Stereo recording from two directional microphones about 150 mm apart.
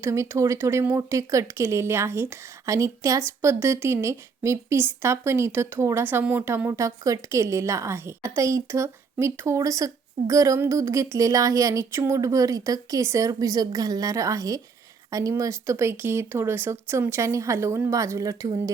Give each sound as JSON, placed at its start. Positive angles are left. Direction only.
{"t": 0.0, "sound": "speech", "side_deg": -20}